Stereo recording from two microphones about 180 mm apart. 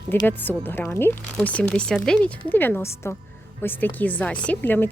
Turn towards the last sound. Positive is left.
turn(degrees=10)  # may be behind; listen again after turning